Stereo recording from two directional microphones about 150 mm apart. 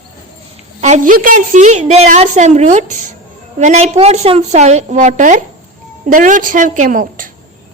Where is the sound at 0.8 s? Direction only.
50° right (ahead or behind).